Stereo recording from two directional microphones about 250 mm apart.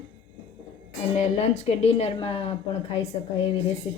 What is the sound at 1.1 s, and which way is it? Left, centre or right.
Speech, left.